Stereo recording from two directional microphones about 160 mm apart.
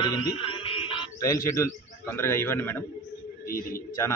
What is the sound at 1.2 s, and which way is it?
A man's voice, 20° left (ahead or behind).